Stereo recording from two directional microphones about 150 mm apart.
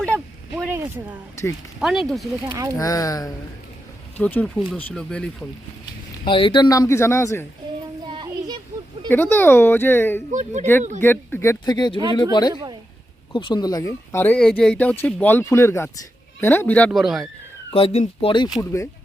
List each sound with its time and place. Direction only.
0.5 s a sound: 10° right (ahead or behind)
1.8 s speech: centre (ahead or behind)
2.7 s speech: 25° left (ahead or behind)
4.2 s speech: 10° left (ahead or behind)
6.2 s speech: 35° left (ahead or behind); by 7.4 s 15° left (ahead or behind)
8.0 s a sound: 30° right (ahead or behind)
9.0 s speech: 15° left (ahead or behind)
10.3 s speech: 50° right (ahead or behind)
11.0 s speech: 15° left (ahead or behind)
11.6 s speech: 30° left (ahead or behind); by 16.9 s 10° left (ahead or behind)
16.9 s speech: centre (ahead or behind)
17.7 s speech: 40° left (ahead or behind)
18.6 s speech: 20° left (ahead or behind)